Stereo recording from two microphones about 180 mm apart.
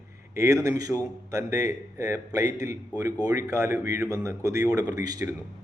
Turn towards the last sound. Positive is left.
turn(degrees=-20)  # may be behind; listen again after turning